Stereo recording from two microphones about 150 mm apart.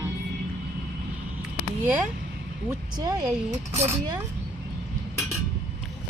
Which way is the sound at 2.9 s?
25° right (ahead or behind).